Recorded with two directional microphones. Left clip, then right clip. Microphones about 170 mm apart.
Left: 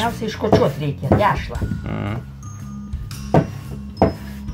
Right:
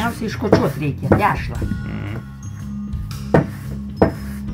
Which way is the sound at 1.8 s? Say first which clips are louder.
Left 3 dB; 30° left (ahead or behind).